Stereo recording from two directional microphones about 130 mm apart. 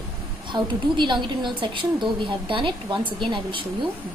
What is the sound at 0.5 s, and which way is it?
Speech, 35° right (ahead or behind).